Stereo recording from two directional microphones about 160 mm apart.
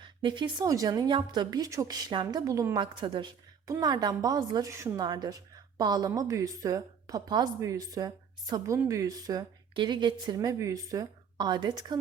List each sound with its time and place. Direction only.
0.0 s a woman's voice: 30° right (ahead or behind)